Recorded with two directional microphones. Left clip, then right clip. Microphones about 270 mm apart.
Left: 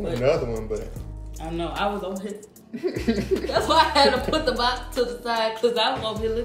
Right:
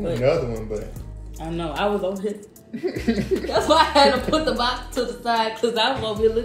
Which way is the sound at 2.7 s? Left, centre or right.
Centre.